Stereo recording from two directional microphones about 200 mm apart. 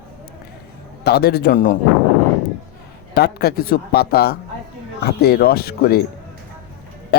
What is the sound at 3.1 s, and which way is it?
Speech, 55° left (ahead or behind).